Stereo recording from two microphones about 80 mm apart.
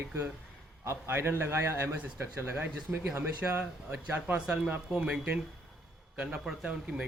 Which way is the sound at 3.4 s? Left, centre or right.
Centre.